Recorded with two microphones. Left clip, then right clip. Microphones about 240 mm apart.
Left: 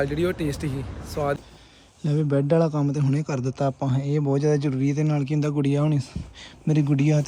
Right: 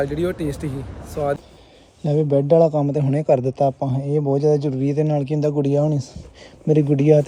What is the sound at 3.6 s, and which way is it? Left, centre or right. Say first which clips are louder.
Speech: right 6 dB; left.